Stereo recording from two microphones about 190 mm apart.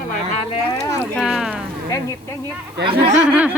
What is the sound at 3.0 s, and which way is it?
Speech, 40° right (ahead or behind).